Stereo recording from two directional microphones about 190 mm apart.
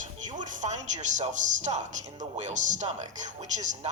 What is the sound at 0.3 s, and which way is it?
A woman's voice, 40° right (ahead or behind).